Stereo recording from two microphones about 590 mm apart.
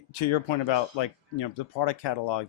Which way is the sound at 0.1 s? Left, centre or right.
Left.